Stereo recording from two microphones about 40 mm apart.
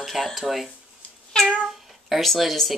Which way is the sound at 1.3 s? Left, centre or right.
Left.